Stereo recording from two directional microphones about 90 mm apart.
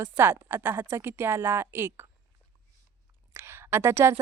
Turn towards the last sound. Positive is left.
turn(degrees=-30)  # may be behind; listen again after turning